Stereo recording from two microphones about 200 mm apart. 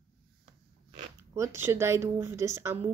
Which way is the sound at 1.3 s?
15° right (ahead or behind).